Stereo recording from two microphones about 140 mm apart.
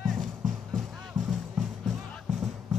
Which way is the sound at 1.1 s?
65° right (ahead or behind).